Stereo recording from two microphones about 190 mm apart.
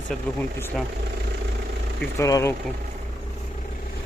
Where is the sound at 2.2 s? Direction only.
15° left (ahead or behind).